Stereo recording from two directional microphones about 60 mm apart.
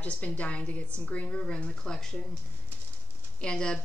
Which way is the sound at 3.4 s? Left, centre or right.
Centre.